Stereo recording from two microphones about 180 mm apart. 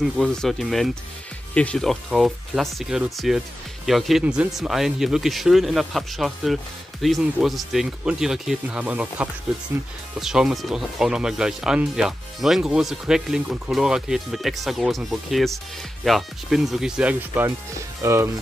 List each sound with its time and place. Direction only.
0.0 s speech: centre (ahead or behind); by 18.3 s 15° right (ahead or behind)